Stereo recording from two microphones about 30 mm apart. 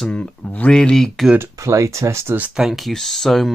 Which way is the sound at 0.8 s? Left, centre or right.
Centre.